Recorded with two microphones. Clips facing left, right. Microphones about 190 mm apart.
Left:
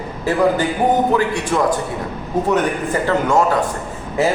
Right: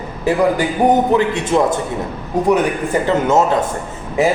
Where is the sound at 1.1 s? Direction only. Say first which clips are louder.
Right 3 dB; 25° right (ahead or behind).